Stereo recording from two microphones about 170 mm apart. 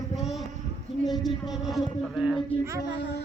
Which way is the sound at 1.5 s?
Centre (ahead or behind).